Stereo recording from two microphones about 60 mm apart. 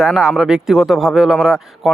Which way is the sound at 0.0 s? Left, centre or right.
Centre.